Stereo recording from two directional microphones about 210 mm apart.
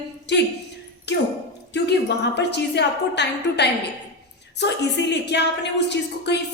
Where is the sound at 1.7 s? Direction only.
55° left (ahead or behind).